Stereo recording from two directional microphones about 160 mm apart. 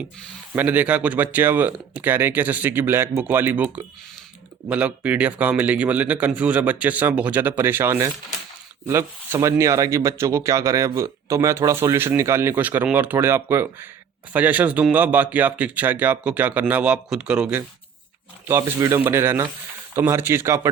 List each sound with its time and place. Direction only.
0.5 s speech: 10° right (ahead or behind)
4.7 s speech: 10° right (ahead or behind)
18.4 s speech: 20° right (ahead or behind)